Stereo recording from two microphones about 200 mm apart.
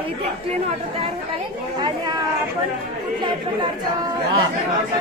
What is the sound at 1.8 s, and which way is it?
Chatter, 20° right (ahead or behind).